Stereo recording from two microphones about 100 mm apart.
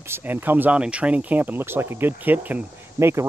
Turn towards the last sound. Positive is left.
turn(degrees=-25)  # may be behind; listen again after turning